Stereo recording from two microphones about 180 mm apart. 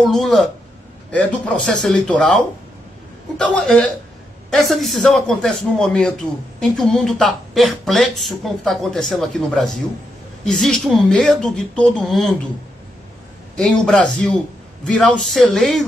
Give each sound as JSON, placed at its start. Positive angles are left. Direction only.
{"t": 0.0, "sound": "speech", "side_deg": 0}
{"t": 13.6, "sound": "speech", "side_deg": 5}